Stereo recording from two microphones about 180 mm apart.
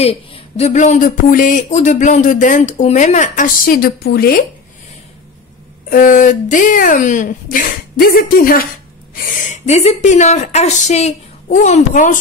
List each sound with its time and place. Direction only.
0.0 s speech: 35° left (ahead or behind); by 4.4 s 60° left (ahead or behind)
5.9 s speech: 50° left (ahead or behind)
9.7 s a woman's voice: 35° left (ahead or behind)